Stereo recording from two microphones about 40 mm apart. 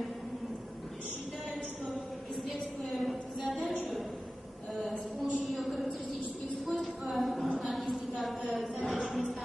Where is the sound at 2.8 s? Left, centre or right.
Centre.